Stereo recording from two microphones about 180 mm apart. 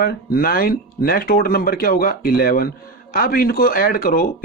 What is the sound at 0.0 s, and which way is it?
Speech, 55° left (ahead or behind).